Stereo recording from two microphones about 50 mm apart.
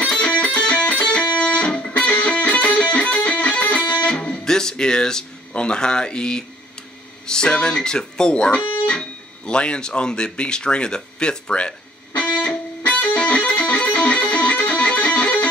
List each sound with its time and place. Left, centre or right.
0.1 s music: centre
7.2 s speech: centre
12.2 s music: left